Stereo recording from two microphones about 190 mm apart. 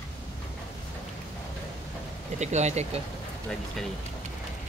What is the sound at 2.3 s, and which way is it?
Speech, 35° right (ahead or behind).